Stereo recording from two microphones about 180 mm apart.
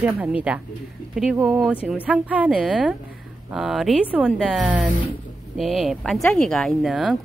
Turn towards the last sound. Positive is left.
turn(degrees=0)  # may be behind; listen again after turning